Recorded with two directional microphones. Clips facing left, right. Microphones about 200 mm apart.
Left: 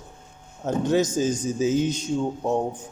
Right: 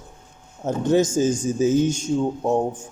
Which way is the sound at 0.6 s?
50° right (ahead or behind).